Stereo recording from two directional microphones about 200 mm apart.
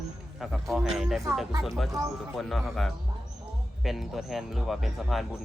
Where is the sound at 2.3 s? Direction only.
Centre (ahead or behind).